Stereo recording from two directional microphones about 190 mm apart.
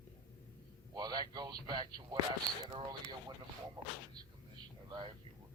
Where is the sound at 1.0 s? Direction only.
20° right (ahead or behind).